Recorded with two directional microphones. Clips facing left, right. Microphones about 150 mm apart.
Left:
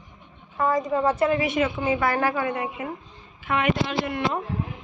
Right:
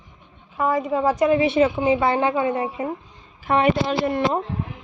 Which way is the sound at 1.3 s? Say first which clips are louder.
Right 6 dB; 30° right (ahead or behind).